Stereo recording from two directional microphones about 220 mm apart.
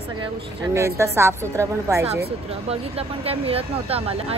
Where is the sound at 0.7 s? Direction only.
15° right (ahead or behind).